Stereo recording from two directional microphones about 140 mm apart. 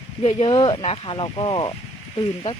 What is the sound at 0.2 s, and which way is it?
Speech, 45° left (ahead or behind).